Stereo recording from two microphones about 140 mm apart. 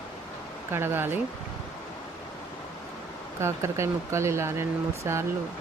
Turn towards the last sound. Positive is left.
turn(degrees=-20)  # may be behind; listen again after turning